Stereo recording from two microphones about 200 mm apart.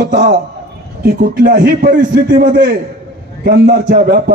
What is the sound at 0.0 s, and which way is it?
A man's voice, 50° right (ahead or behind).